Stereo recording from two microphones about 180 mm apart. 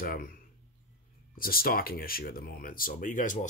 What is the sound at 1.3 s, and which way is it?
Speech, 55° left (ahead or behind).